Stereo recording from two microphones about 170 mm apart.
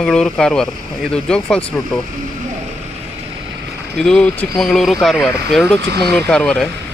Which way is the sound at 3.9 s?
5° left (ahead or behind).